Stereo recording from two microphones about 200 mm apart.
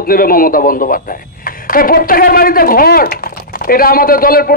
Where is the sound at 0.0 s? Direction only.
45° left (ahead or behind).